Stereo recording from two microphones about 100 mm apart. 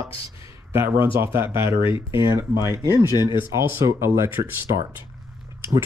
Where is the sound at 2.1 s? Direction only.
50° left (ahead or behind).